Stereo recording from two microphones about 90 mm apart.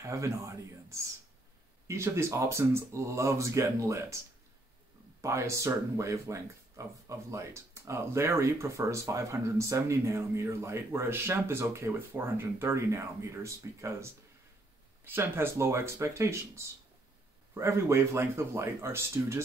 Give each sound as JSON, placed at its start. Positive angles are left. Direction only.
{"t": 0.0, "sound": "speech", "side_deg": -35}
{"t": 5.2, "sound": "speech", "side_deg": -35}
{"t": 15.0, "sound": "speech", "side_deg": -25}